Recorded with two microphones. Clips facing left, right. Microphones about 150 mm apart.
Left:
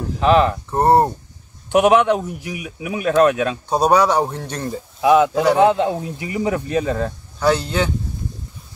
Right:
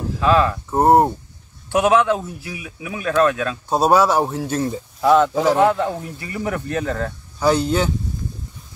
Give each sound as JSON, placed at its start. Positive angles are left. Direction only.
{"t": 0.2, "sound": "a man's voice", "side_deg": 20}
{"t": 0.7, "sound": "a man's voice", "side_deg": -5}
{"t": 1.7, "sound": "a man's voice", "side_deg": 20}
{"t": 3.6, "sound": "a man's voice", "side_deg": -5}
{"t": 5.0, "sound": "speech", "side_deg": 10}
{"t": 5.6, "sound": "speech", "side_deg": 20}
{"t": 7.3, "sound": "a man's voice", "side_deg": -5}